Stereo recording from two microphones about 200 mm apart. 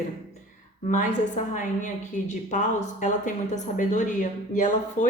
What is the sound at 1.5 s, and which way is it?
A woman's voice, 40° left (ahead or behind).